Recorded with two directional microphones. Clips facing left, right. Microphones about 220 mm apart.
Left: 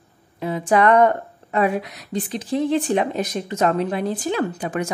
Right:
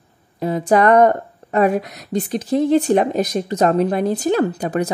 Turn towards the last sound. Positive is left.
turn(degrees=-35)  # may be behind; listen again after turning